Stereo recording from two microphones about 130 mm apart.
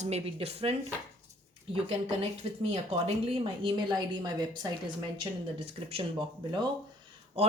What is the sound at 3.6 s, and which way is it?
Speech, 30° right (ahead or behind).